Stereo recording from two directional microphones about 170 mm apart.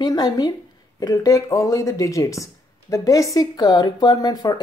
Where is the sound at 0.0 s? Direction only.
25° left (ahead or behind).